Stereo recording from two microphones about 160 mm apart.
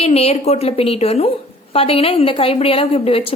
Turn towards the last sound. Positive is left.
turn(degrees=35)  # may be behind; listen again after turning